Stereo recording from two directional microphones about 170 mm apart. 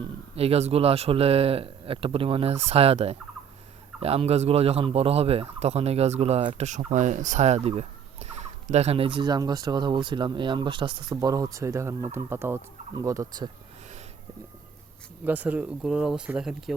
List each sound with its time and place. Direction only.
0.0 s speech: 35° right (ahead or behind)
15.2 s speech: 10° right (ahead or behind)